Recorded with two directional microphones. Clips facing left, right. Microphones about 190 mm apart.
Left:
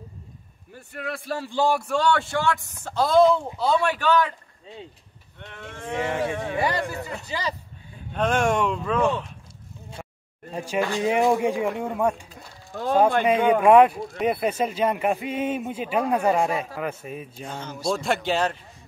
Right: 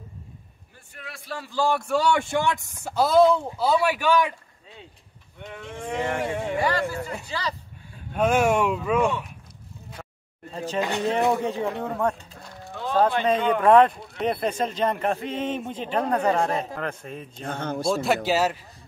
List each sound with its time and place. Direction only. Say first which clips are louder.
0.9 s a man's voice: left 7 dB; 55° left (ahead or behind)
1.9 s speech: even; 10° right (ahead or behind)
5.4 s speech: right 3 dB; 5° right (ahead or behind)
6.0 s speech: left 1 dB; 10° left (ahead or behind)
8.1 s speech: right 2 dB; 10° right (ahead or behind)
10.0 s a sound: left 3 dB; 10° left (ahead or behind)
10.5 s speech: left 1 dB; 10° left (ahead or behind)
12.7 s a man's voice: left 4 dB; 45° left (ahead or behind)
13.2 s speech: left 2 dB; 10° left (ahead or behind)
17.5 s speech: right 9 dB; 55° right (ahead or behind)
17.8 s speech: right 1 dB; centre (ahead or behind)